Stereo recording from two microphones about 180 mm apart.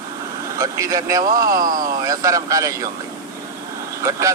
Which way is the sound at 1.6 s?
50° right (ahead or behind).